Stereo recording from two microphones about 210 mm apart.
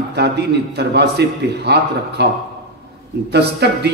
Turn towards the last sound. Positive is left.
turn(degrees=-50)  # may be behind; listen again after turning